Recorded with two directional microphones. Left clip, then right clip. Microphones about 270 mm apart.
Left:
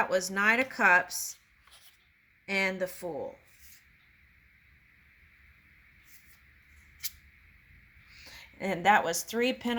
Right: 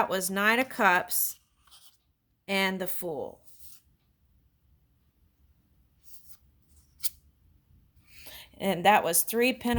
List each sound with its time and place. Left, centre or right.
0.0 s speech: right
2.5 s speech: right
8.1 s speech: right